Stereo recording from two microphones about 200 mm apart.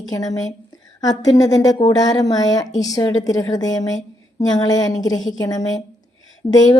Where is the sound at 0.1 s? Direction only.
20° left (ahead or behind).